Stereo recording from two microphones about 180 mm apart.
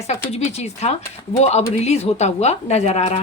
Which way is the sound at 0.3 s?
35° left (ahead or behind).